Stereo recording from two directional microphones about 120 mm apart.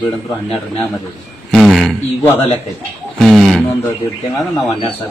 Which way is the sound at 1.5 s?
Centre (ahead or behind).